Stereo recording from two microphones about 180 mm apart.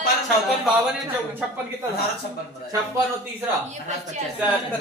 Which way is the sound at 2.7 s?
15° right (ahead or behind).